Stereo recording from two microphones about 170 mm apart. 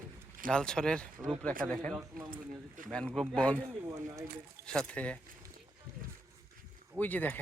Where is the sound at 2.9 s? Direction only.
5° left (ahead or behind).